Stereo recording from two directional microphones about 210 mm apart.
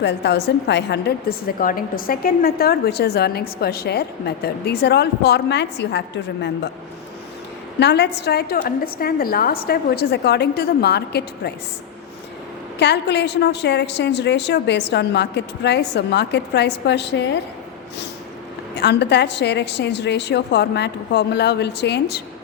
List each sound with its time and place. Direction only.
0.0 s a woman's voice: 55° left (ahead or behind)
7.8 s a woman's voice: 55° left (ahead or behind)
12.8 s a woman's voice: 55° left (ahead or behind)
18.8 s a woman's voice: 55° left (ahead or behind)